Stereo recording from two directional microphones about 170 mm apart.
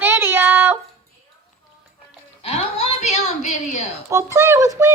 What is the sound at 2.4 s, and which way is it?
Music, 35° left (ahead or behind).